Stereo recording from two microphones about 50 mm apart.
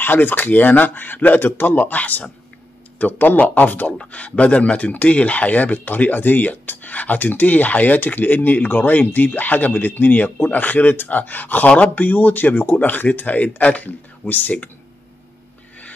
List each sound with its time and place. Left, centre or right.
0.0 s speech: left
11.6 s speech: left
11.9 s speech: left